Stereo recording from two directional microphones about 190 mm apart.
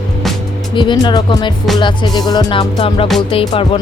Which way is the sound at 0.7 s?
25° left (ahead or behind).